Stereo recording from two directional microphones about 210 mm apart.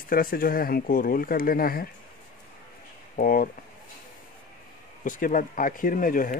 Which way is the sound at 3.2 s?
40° left (ahead or behind).